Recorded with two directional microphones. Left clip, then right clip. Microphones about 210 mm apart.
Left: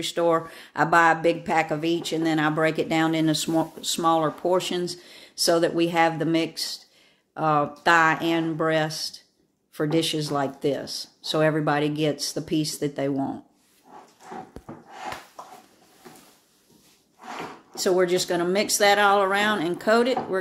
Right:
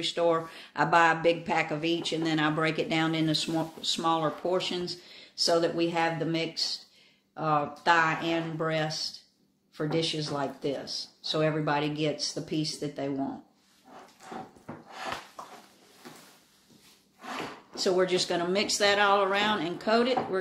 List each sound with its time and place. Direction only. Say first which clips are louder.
0.0 s speech: left 4 dB; 35° left (ahead or behind)
17.7 s speech: left 4 dB; 30° left (ahead or behind)